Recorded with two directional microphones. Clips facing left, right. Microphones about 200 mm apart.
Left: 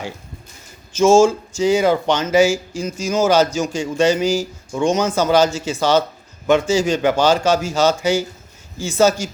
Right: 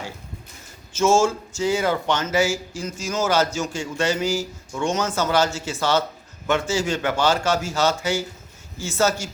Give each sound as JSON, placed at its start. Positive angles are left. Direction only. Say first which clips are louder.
{"t": 0.9, "sound": "speech", "louder": "left 6 dB", "side_deg": 15}